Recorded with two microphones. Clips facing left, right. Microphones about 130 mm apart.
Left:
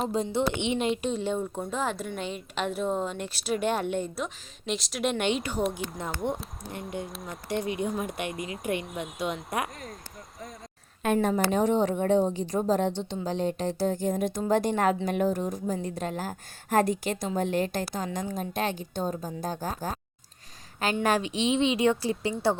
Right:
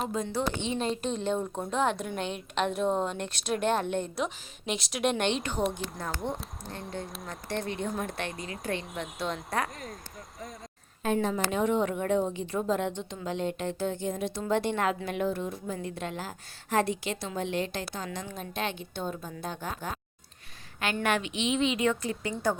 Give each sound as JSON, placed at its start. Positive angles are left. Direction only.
{"t": 0.1, "sound": "speech", "side_deg": 25}
{"t": 1.0, "sound": "a woman's voice", "side_deg": 10}
{"t": 6.2, "sound": "speech", "side_deg": 15}
{"t": 7.0, "sound": "a woman's voice", "side_deg": 0}
{"t": 11.0, "sound": "a woman's voice", "side_deg": 60}
{"t": 11.5, "sound": "a woman's voice", "side_deg": 35}
{"t": 21.0, "sound": "a woman's voice", "side_deg": 35}